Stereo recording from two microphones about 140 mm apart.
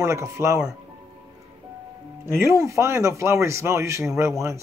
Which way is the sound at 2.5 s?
20° right (ahead or behind).